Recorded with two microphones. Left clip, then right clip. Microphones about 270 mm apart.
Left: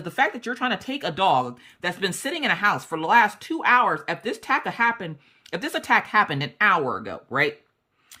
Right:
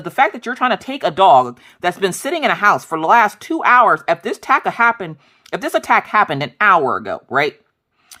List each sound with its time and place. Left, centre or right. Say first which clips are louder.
0.0 s speech: right 7 dB; centre